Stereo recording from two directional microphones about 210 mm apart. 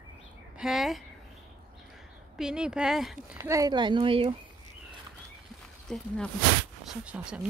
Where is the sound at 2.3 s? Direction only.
5° right (ahead or behind).